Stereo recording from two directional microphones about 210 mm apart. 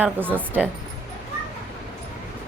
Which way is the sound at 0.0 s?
10° right (ahead or behind).